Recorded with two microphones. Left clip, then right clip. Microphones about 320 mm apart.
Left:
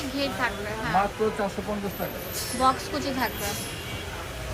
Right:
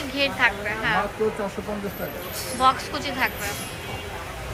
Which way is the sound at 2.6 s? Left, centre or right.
Centre.